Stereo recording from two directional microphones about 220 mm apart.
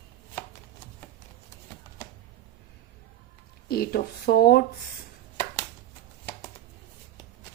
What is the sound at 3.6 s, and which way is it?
Speech, 45° left (ahead or behind).